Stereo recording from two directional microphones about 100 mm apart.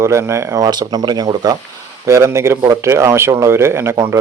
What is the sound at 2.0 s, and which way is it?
Speech, 30° right (ahead or behind).